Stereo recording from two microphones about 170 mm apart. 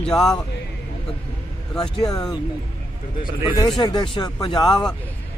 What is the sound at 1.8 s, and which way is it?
Speech, 20° left (ahead or behind).